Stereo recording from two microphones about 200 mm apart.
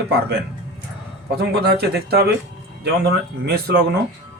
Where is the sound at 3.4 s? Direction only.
50° right (ahead or behind).